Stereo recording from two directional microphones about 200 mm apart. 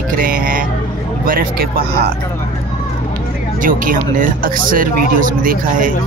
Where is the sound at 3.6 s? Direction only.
40° right (ahead or behind).